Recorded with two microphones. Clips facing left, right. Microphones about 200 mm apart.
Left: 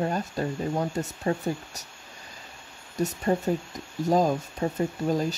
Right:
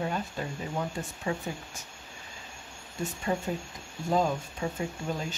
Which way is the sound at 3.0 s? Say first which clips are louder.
Left 6 dB; 40° left (ahead or behind).